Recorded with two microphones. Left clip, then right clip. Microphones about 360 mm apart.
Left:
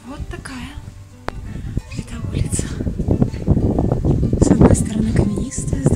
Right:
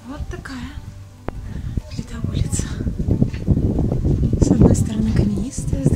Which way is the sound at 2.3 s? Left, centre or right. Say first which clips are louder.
Left 3 dB; centre.